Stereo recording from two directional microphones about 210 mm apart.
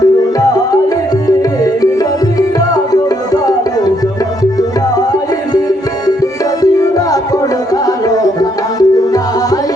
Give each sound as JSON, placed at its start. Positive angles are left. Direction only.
{"t": 1.4, "sound": "music", "side_deg": 15}
{"t": 6.6, "sound": "music", "side_deg": 15}
{"t": 7.9, "sound": "tabla", "side_deg": 15}